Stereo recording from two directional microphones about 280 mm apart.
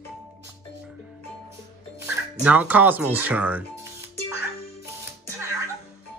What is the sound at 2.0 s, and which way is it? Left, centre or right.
Speech, centre.